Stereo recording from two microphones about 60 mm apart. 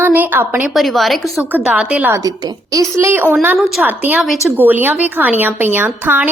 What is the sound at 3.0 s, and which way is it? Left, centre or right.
A woman's voice, right.